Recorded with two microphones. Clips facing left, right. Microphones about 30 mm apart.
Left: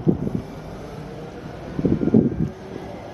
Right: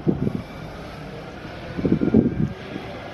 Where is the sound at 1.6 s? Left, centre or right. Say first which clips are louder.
Even; right.